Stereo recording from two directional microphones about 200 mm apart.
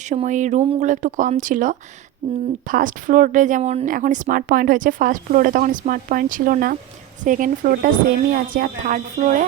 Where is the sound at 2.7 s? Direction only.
40° right (ahead or behind).